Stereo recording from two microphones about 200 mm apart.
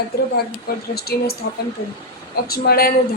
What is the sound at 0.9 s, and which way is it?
Speech, 50° left (ahead or behind).